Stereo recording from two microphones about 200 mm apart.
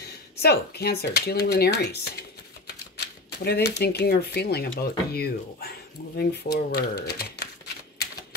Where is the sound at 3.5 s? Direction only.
55° left (ahead or behind).